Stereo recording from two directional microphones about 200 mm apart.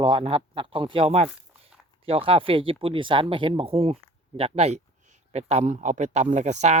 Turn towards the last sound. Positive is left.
turn(degrees=-35)  # may be behind; listen again after turning